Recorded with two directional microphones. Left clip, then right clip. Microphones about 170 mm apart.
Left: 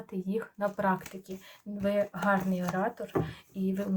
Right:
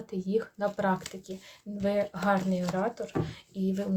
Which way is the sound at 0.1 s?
35° right (ahead or behind).